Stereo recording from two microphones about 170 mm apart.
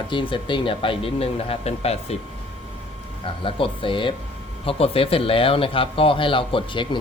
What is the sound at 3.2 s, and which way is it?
Speech, 30° left (ahead or behind).